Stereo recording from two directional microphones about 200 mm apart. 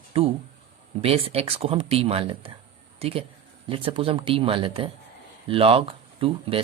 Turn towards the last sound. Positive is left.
turn(degrees=-25)  # may be behind; listen again after turning